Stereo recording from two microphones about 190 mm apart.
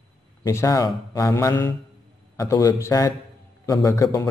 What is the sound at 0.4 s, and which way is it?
A man's voice, 15° left (ahead or behind).